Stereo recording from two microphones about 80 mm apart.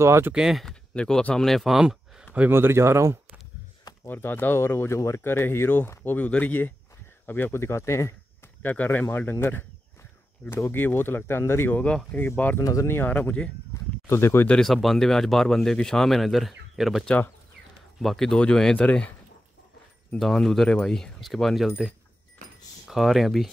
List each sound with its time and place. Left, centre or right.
0.0 s speech: right
0.3 s speech: centre
0.9 s speech: centre
2.5 s speech: right
4.0 s speech: left
8.6 s speech: left
12.5 s speech: left
12.9 s speech: left
14.0 s speech: left
14.5 s speech: centre
18.0 s speech: centre
20.2 s speech: centre
22.8 s speech: centre